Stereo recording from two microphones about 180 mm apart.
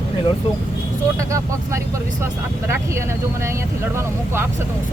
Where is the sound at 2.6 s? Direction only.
15° right (ahead or behind).